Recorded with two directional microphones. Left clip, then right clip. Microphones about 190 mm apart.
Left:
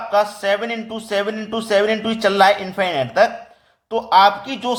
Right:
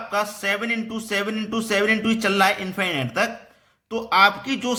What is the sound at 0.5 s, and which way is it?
Speech, 20° right (ahead or behind).